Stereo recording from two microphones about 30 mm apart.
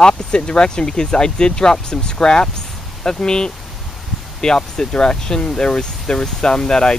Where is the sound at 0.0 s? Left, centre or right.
Left.